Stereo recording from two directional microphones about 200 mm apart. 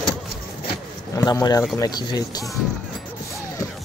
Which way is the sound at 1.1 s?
20° left (ahead or behind).